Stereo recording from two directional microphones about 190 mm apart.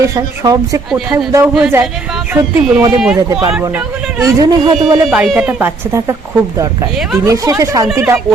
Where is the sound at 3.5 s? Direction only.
10° right (ahead or behind).